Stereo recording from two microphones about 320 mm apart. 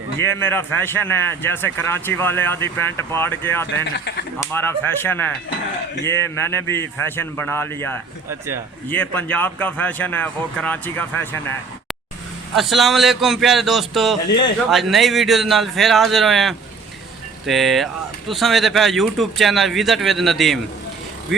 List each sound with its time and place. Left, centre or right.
0.3 s speech: centre
3.9 s speech: left
4.4 s speech: centre